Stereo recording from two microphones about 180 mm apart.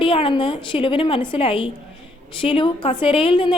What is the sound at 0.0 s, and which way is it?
A woman's voice, 30° left (ahead or behind).